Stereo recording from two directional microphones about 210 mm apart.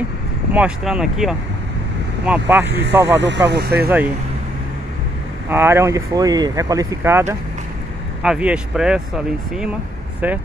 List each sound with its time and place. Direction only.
0.5 s speech: 5° right (ahead or behind)
2.6 s speech: 55° right (ahead or behind)
2.9 s speech: 10° right (ahead or behind)
3.2 s speech: 55° right (ahead or behind)
5.5 s speech: 10° right (ahead or behind)